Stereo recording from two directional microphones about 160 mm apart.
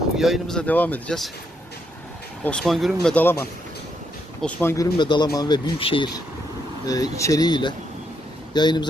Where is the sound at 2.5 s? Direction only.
Centre (ahead or behind).